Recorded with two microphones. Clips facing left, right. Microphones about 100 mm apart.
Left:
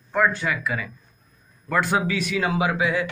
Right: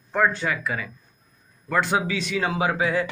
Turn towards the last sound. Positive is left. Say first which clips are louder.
# even
turn(degrees=-40)  # may be behind; listen again after turning